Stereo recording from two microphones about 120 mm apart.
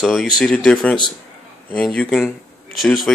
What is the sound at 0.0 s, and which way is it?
Speech, 5° left (ahead or behind).